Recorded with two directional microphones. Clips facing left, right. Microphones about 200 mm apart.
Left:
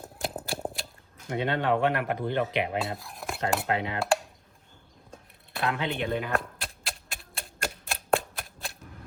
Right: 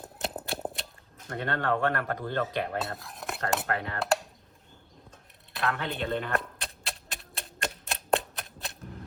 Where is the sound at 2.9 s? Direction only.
Centre (ahead or behind).